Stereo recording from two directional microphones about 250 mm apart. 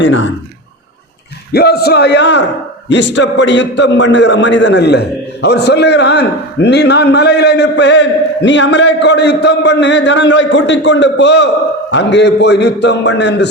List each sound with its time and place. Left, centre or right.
0.0 s a man's voice: left
1.5 s a man's voice: left